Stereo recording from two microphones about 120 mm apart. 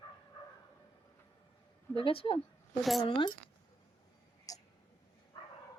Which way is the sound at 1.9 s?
50° left (ahead or behind).